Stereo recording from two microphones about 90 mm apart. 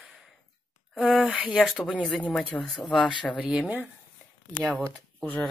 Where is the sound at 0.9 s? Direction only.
5° right (ahead or behind); by 3.1 s 10° left (ahead or behind).